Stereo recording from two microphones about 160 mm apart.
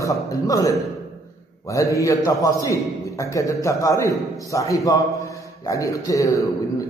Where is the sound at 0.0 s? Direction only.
20° left (ahead or behind).